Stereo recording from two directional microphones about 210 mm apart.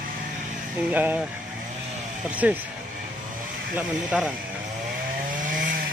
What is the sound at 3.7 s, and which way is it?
Speech, 5° right (ahead or behind).